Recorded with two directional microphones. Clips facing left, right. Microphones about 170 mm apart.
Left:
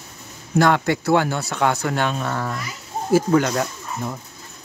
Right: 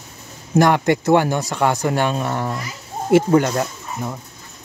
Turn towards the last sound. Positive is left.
turn(degrees=-10)  # may be behind; listen again after turning